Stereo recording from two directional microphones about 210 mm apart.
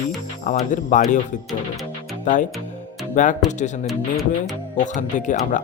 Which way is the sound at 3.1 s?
35° left (ahead or behind).